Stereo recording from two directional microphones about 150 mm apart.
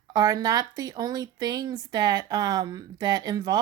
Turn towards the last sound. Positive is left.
turn(degrees=-30)  # may be behind; listen again after turning